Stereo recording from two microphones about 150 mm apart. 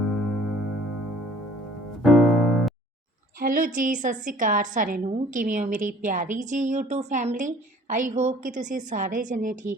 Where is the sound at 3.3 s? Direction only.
65° right (ahead or behind).